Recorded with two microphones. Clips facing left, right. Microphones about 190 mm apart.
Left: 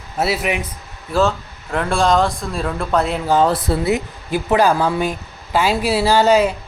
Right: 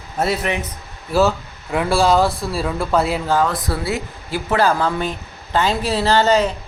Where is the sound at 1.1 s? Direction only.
5° right (ahead or behind).